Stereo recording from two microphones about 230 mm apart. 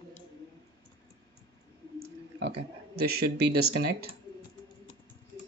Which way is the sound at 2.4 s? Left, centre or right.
Right.